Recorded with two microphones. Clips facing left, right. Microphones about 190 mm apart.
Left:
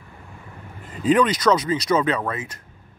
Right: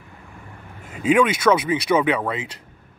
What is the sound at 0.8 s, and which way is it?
A man's voice, 5° right (ahead or behind).